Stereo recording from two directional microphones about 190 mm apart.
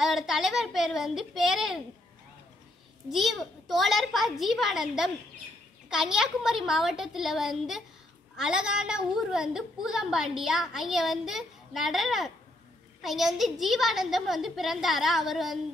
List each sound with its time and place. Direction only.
0.0 s speech: centre (ahead or behind)
3.1 s a woman's voice: centre (ahead or behind)